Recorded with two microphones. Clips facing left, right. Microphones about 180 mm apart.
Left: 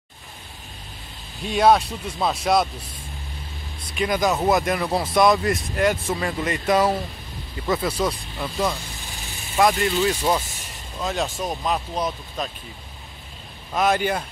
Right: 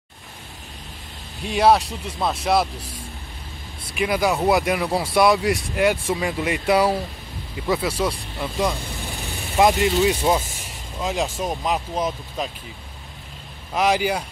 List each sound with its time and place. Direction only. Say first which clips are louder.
1.4 s speech: even; 5° right (ahead or behind)
3.9 s speech: right 1 dB; 10° right (ahead or behind)
9.0 s vehicle: right 6 dB; 60° right (ahead or behind)
9.6 s speech: right 2 dB; 20° right (ahead or behind)
13.7 s speech: right 1 dB; 10° right (ahead or behind)